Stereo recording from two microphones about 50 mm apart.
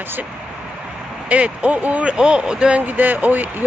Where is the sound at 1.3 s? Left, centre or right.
Right.